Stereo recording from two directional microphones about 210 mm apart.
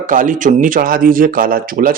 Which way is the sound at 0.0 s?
40° right (ahead or behind).